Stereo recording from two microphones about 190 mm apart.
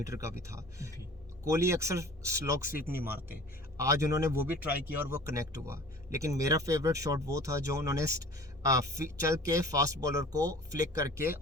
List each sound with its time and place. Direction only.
0.0 s speech: 15° right (ahead or behind)